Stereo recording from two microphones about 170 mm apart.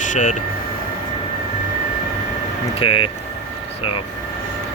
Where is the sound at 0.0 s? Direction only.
45° left (ahead or behind).